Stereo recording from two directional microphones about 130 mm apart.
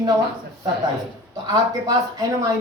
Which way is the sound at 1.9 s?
30° right (ahead or behind).